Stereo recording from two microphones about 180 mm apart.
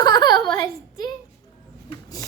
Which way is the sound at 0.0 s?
25° left (ahead or behind).